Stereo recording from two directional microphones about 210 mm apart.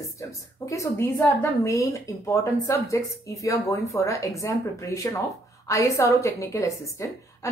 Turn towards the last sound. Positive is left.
turn(degrees=15)  # may be behind; listen again after turning